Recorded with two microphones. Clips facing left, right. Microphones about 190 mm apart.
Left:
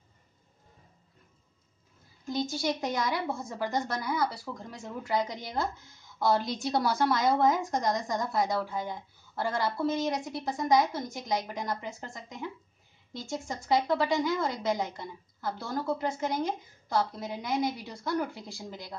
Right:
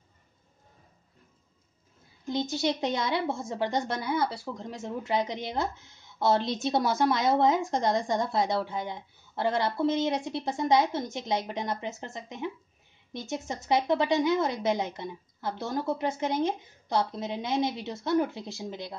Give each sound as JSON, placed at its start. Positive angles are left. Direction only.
{"t": 2.2, "sound": "a woman's voice", "side_deg": -20}